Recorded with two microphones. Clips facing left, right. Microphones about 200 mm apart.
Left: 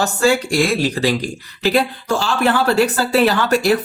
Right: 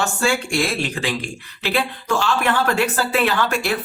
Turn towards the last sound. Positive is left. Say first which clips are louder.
# left 5 dB
turn(degrees=40)  # may be behind; listen again after turning